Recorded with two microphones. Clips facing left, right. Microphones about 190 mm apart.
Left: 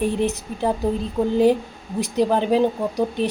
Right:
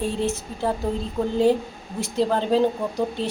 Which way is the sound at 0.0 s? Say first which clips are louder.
Left 3 dB; 20° left (ahead or behind).